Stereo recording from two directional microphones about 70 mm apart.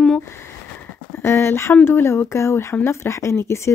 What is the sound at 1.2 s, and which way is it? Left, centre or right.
Speech, left.